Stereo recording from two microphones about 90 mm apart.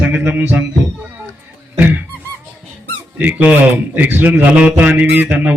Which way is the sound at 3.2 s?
20° right (ahead or behind).